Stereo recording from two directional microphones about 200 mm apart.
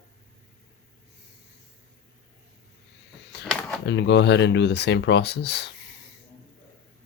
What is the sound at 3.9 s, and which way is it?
Speech, 60° left (ahead or behind).